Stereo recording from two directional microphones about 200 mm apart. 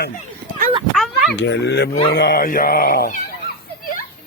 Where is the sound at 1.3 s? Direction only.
65° left (ahead or behind); by 3.5 s 50° left (ahead or behind).